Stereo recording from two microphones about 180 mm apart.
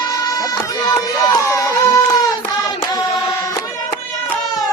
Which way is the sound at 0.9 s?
20° left (ahead or behind).